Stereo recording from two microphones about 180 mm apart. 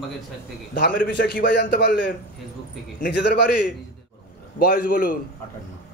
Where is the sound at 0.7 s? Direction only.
50° left (ahead or behind).